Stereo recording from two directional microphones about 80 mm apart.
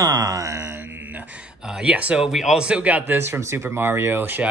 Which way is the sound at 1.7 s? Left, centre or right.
Centre.